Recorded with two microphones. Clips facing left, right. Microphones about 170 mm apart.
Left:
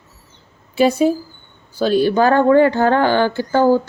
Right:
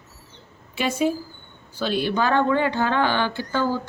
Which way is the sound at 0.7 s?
35° left (ahead or behind).